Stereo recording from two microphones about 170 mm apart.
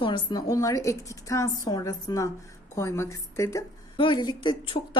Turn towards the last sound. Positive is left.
turn(degrees=30)  # may be behind; listen again after turning